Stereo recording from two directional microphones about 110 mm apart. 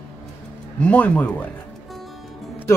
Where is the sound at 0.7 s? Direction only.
15° left (ahead or behind).